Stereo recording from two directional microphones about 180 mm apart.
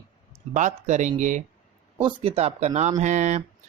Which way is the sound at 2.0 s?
30° right (ahead or behind).